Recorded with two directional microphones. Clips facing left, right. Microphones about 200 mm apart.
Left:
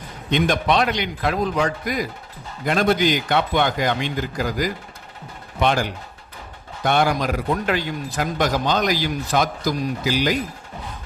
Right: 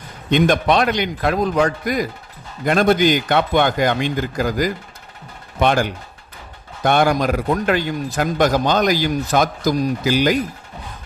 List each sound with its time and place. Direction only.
0.3 s a man's voice: 50° right (ahead or behind)
6.8 s a man's voice: 50° right (ahead or behind)